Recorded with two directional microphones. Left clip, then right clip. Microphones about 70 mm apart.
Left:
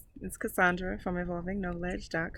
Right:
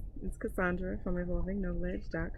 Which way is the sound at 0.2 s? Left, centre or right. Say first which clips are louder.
Left 7 dB; left.